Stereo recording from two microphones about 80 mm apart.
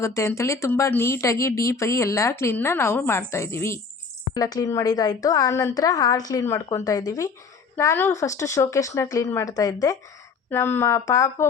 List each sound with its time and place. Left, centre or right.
0.0 s speech: left
4.4 s a woman's voice: left
6.4 s a woman's voice: left
10.5 s speech: left